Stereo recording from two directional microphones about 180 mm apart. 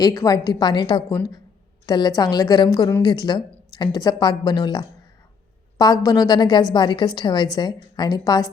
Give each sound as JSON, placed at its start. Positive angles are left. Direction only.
{"t": 0.0, "sound": "a woman's voice", "side_deg": 20}